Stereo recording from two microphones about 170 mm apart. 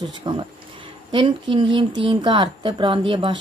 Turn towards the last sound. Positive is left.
turn(degrees=-30)  # may be behind; listen again after turning